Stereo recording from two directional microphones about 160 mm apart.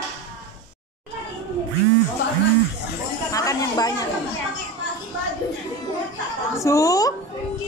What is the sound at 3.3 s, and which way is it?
Speech, 20° left (ahead or behind).